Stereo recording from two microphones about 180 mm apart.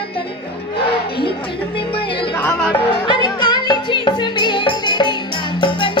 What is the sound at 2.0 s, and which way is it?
Music, 30° left (ahead or behind).